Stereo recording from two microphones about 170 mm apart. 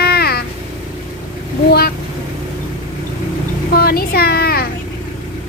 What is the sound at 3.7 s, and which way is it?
Speech, 65° left (ahead or behind).